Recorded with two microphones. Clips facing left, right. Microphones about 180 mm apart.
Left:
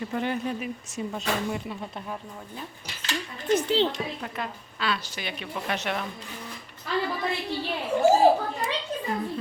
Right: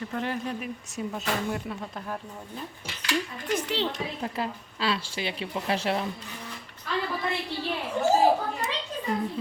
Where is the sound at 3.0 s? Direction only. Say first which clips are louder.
Right 3 dB; 25° left (ahead or behind).